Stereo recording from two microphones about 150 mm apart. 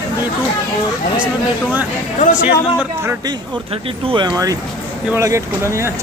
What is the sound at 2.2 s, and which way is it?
Speech, 55° left (ahead or behind).